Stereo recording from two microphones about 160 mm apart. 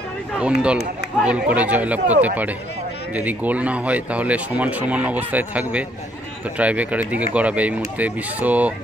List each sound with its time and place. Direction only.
0.4 s speech: 5° right (ahead or behind)